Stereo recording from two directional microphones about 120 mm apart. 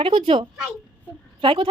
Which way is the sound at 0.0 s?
50° right (ahead or behind).